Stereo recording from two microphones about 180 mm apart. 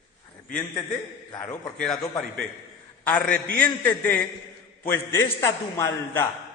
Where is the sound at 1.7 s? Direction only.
5° left (ahead or behind).